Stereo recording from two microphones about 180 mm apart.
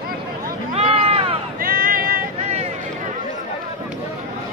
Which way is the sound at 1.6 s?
50° right (ahead or behind).